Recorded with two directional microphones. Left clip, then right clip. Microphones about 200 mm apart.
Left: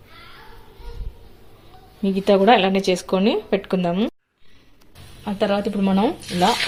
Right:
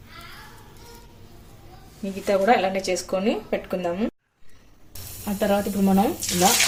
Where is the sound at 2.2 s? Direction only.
40° left (ahead or behind).